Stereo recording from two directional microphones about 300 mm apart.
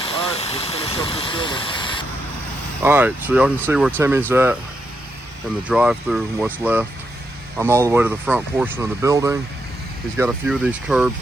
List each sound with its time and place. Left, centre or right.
0.0 s engine: centre
2.8 s speech: centre
5.6 s speech: centre